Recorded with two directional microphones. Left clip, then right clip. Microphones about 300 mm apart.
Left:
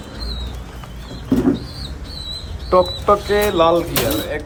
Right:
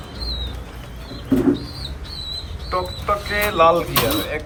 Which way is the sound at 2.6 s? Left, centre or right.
Centre.